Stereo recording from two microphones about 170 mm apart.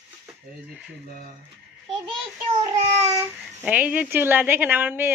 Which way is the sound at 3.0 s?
15° right (ahead or behind).